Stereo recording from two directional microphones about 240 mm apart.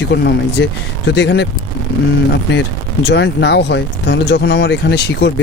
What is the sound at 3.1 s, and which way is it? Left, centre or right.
Speech, left.